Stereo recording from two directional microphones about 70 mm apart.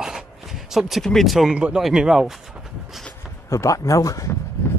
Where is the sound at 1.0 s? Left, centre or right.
Centre.